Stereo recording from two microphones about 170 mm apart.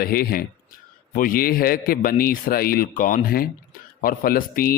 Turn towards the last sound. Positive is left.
turn(degrees=60)  # may be behind; listen again after turning